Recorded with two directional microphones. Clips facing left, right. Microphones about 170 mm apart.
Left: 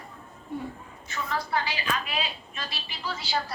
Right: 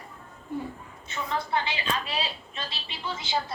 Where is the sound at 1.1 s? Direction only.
25° right (ahead or behind).